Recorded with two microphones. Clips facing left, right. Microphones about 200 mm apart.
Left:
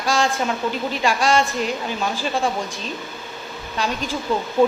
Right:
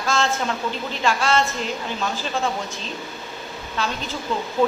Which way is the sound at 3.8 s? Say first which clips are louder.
Left 2 dB; 15° left (ahead or behind).